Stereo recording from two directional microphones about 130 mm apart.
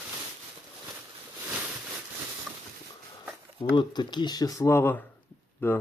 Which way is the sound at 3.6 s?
35° left (ahead or behind).